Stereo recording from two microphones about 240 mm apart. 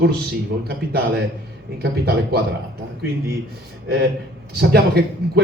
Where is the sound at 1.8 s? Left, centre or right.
Right.